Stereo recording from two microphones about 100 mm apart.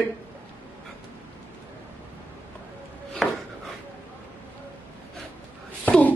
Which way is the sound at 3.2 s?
Centre (ahead or behind).